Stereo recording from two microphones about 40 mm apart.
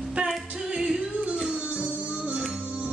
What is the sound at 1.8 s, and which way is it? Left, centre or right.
Music, right.